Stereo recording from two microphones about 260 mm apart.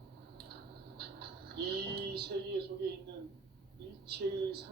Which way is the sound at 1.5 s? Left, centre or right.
Right.